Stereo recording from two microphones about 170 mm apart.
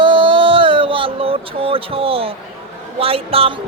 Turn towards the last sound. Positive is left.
turn(degrees=-35)  # may be behind; listen again after turning